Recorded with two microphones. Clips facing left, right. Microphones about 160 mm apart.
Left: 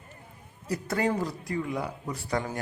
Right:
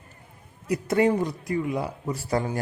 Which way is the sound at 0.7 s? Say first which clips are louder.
Right 6 dB; 25° right (ahead or behind).